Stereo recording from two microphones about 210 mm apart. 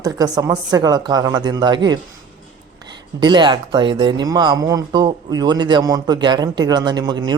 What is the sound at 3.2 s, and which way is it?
Speech, 20° right (ahead or behind).